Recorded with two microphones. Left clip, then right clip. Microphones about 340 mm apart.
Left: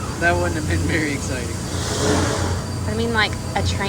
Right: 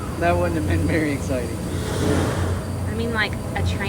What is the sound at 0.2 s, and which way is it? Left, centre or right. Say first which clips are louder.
Speech: left 1 dB; centre.